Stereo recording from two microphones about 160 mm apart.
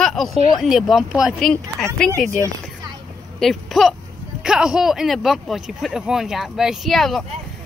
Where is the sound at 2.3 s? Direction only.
20° right (ahead or behind).